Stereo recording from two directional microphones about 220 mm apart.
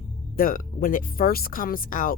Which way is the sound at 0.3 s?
40° left (ahead or behind).